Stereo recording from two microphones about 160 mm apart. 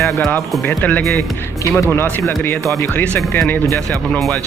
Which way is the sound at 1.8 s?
15° left (ahead or behind).